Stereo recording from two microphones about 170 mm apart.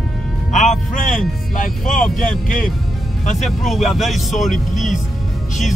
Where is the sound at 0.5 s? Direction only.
45° left (ahead or behind).